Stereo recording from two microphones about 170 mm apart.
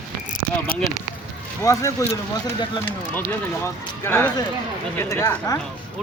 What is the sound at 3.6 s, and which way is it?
Speech, 15° left (ahead or behind).